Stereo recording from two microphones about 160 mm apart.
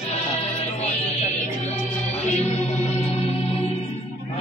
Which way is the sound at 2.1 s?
40° left (ahead or behind).